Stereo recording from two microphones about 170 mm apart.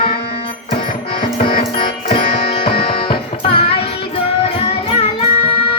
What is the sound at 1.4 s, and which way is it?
Music, 30° left (ahead or behind).